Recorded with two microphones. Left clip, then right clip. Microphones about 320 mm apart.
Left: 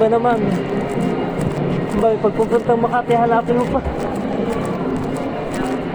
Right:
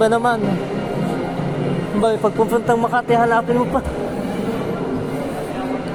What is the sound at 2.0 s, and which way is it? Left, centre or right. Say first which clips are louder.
Speech: left 1 dB; right.